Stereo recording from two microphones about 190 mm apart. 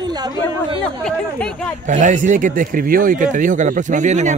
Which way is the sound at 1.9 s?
40° right (ahead or behind).